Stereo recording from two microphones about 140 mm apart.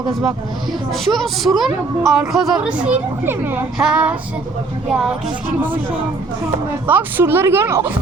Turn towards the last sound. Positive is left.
turn(degrees=-15)  # may be behind; listen again after turning